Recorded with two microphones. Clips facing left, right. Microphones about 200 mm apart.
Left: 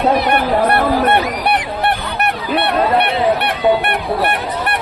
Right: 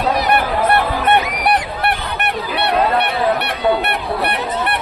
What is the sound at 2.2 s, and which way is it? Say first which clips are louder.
Goose: left 3 dB; 55° left (ahead or behind).